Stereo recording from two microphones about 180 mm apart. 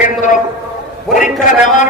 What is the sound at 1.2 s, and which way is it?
Speech, 45° left (ahead or behind).